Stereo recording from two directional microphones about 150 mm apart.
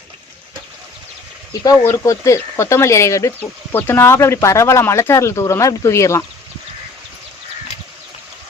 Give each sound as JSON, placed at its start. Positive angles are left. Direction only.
{"t": 1.6, "sound": "speech", "side_deg": 20}